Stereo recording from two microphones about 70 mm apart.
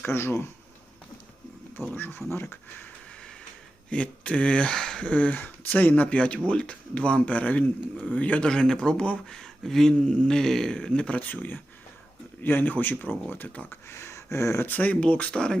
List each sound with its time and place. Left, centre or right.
0.0 s speech: left
1.9 s speech: left
3.8 s speech: centre
13.9 s speech: left
14.7 s speech: left